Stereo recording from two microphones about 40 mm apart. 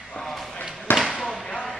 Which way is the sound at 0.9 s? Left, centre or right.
Centre.